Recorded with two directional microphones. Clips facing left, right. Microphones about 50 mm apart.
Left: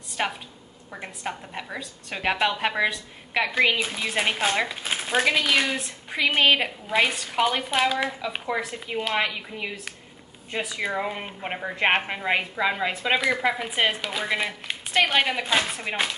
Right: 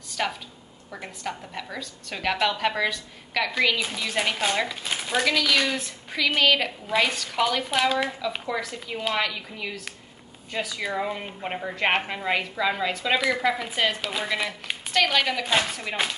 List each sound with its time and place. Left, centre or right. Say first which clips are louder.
0.2 s a woman's voice: even; left
6.9 s speech: left 1 dB; centre
7.2 s a woman's voice: left 1 dB; left
7.7 s speech: even; centre
8.2 s a woman's voice: left 1 dB; left
10.5 s a woman's voice: left 1 dB; left
14.0 s speech: left 1 dB; centre
15.1 s a woman's voice: left 1 dB; left
15.4 s speech: even; centre
15.7 s a woman's voice: left 1 dB; centre